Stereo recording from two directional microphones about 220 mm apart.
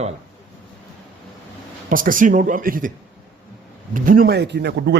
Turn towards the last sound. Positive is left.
turn(degrees=-50)  # may be behind; listen again after turning